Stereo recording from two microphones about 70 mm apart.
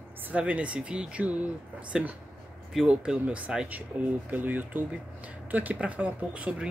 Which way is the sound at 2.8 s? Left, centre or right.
Centre.